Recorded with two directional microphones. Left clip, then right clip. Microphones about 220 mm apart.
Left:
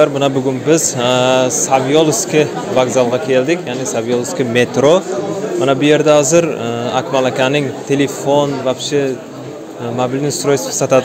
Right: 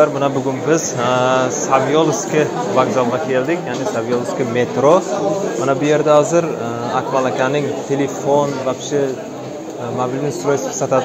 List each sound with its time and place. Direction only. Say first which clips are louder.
0.0 s a man's voice: left 2 dB; 50° left (ahead or behind)